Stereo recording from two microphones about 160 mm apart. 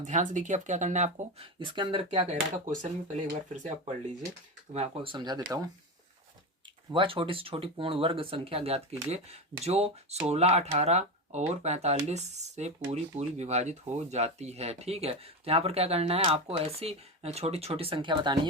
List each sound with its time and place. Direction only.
0.0 s speech: 50° right (ahead or behind)
2.6 s speech: 45° right (ahead or behind)
5.1 s speech: 25° right (ahead or behind)
6.9 s speech: 35° right (ahead or behind)